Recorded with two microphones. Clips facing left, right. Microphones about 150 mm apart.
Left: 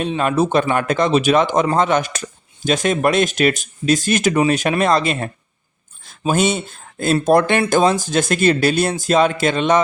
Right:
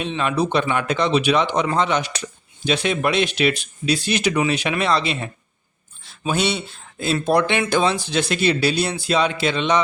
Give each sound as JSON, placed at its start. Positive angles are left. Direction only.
{"t": 0.0, "sound": "speech", "side_deg": 45}